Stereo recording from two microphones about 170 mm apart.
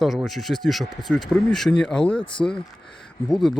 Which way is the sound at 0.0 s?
Centre (ahead or behind).